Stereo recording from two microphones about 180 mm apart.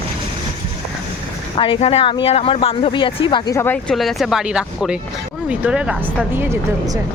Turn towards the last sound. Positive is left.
turn(degrees=-15)  # may be behind; listen again after turning